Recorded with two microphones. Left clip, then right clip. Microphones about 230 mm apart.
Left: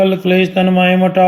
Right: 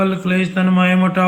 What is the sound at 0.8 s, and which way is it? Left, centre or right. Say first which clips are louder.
Speech: left 5 dB; centre.